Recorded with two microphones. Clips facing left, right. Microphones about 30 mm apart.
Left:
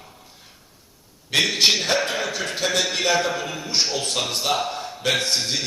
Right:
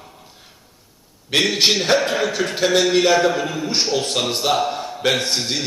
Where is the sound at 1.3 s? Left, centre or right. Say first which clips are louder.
Right 2 dB; centre.